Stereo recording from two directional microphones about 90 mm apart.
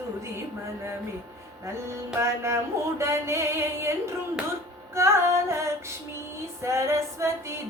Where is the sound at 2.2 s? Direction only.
30° right (ahead or behind).